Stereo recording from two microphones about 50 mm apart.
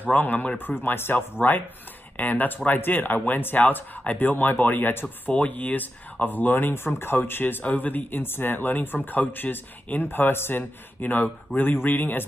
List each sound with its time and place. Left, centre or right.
0.0 s speech: left
5.3 s speech: left
10.0 s speech: left
11.0 s speech: left